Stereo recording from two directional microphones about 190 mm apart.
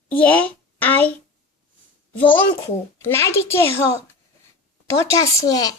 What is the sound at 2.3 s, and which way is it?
A child's voice, 10° left (ahead or behind).